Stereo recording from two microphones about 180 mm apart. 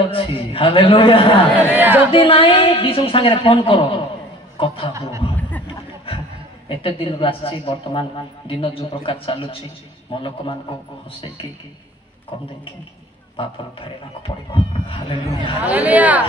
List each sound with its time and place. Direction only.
0.1 s a man's voice: 30° left (ahead or behind)
1.7 s a man's voice: 10° right (ahead or behind)
2.1 s a woman's voice: 30° left (ahead or behind)
6.7 s a woman's voice: 30° left (ahead or behind)
13.4 s a woman's voice: 30° left (ahead or behind)
15.6 s a man's voice: 10° right (ahead or behind)